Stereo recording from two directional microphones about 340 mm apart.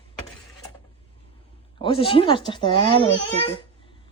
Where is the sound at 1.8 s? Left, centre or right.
Centre.